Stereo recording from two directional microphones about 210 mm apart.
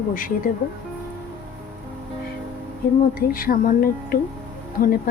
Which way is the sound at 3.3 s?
45° left (ahead or behind).